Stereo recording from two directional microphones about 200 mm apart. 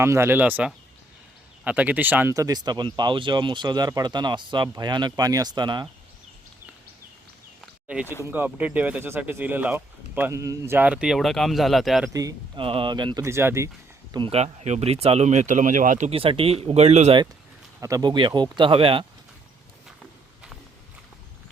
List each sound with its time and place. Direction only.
0.0 s speech: 10° right (ahead or behind)
7.6 s a sound: 5° right (ahead or behind)
8.0 s speech: 10° left (ahead or behind)
8.3 s speech: 10° right (ahead or behind)
12.1 s speech: 20° right (ahead or behind)
14.1 s speech: 25° right (ahead or behind)
17.7 s speech: 15° right (ahead or behind)